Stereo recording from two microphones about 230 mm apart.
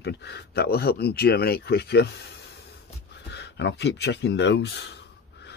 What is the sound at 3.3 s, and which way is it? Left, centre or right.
Speech, left.